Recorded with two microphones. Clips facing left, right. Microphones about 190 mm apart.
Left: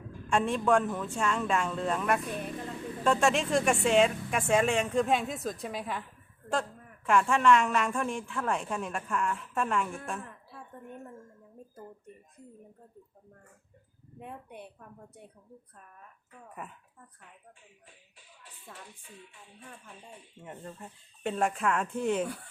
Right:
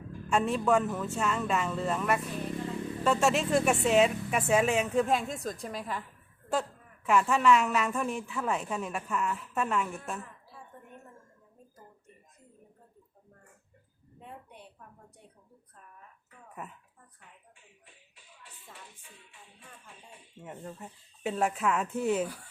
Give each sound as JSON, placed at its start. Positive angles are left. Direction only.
{"t": 0.3, "sound": "a woman's voice", "side_deg": -5}
{"t": 14.2, "sound": "a sound", "side_deg": 60}
{"t": 20.4, "sound": "a woman's voice", "side_deg": -5}